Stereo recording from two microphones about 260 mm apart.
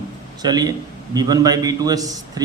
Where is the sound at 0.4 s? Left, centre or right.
Centre.